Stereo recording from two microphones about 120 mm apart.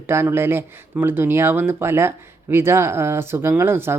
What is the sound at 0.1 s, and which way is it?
Speech, 20° right (ahead or behind).